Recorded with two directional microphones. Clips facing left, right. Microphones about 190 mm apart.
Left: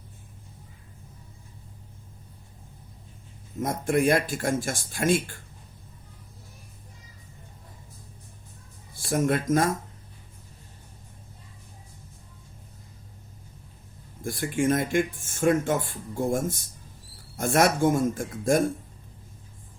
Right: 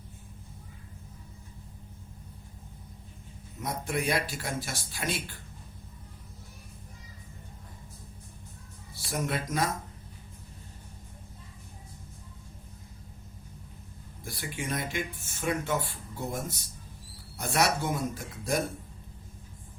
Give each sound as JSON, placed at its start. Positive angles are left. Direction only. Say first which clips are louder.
{"t": 3.6, "sound": "speech", "louder": "left 8 dB", "side_deg": 50}
{"t": 9.0, "sound": "speech", "louder": "left 8 dB", "side_deg": 50}
{"t": 14.3, "sound": "speech", "louder": "left 11 dB", "side_deg": 50}